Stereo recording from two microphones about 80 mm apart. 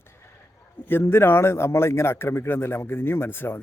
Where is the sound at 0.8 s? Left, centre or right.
Left.